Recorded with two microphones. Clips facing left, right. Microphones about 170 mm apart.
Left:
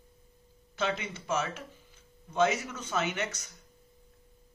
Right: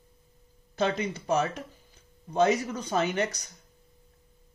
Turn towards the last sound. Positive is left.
turn(degrees=-35)  # may be behind; listen again after turning